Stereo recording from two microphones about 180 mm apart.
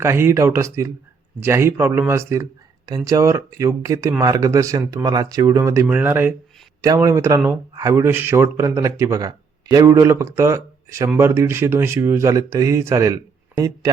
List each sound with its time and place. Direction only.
0.0 s a man's voice: 15° right (ahead or behind)